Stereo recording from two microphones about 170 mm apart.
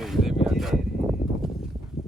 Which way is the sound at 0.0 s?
Centre (ahead or behind).